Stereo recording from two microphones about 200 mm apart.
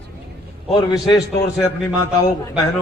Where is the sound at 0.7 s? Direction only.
20° left (ahead or behind).